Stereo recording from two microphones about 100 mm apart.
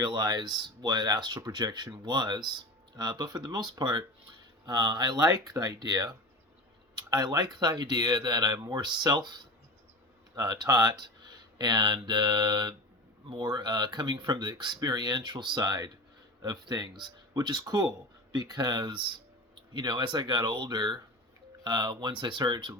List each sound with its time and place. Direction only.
0.0 s speech: 45° right (ahead or behind)